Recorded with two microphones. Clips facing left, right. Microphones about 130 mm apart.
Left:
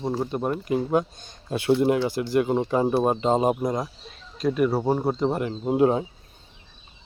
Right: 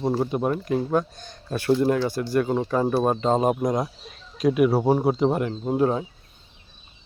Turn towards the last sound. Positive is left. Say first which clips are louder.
# left 2 dB
turn(degrees=20)  # may be behind; listen again after turning